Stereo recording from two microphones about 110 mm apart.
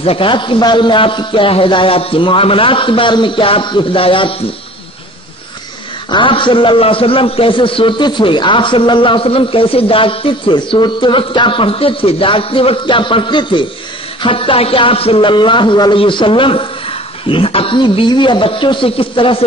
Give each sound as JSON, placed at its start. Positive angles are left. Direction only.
{"t": 0.0, "sound": "a man's voice", "side_deg": 55}
{"t": 6.0, "sound": "a man's voice", "side_deg": 50}